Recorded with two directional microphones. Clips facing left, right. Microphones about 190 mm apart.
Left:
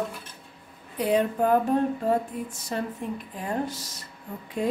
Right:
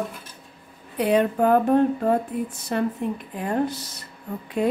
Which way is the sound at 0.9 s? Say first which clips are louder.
Right 3 dB; 70° right (ahead or behind).